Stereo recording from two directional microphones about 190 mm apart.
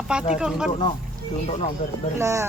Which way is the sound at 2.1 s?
15° right (ahead or behind).